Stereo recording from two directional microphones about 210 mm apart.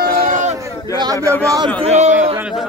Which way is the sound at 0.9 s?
15° left (ahead or behind).